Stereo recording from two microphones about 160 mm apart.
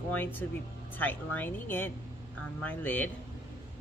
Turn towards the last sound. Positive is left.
turn(degrees=10)  # may be behind; listen again after turning